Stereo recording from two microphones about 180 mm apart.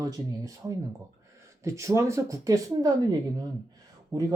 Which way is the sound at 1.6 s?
15° right (ahead or behind).